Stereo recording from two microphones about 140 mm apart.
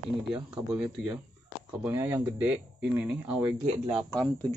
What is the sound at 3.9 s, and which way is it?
Speech, centre (ahead or behind).